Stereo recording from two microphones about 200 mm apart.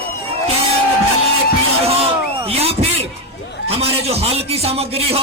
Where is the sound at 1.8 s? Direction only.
30° right (ahead or behind).